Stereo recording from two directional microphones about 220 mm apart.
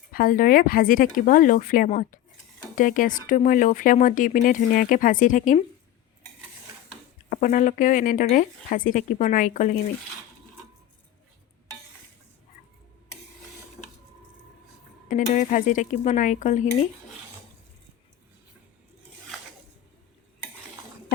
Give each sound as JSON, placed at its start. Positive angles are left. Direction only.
{"t": 0.1, "sound": "speech", "side_deg": 40}
{"t": 7.3, "sound": "speech", "side_deg": 35}
{"t": 15.4, "sound": "speech", "side_deg": 35}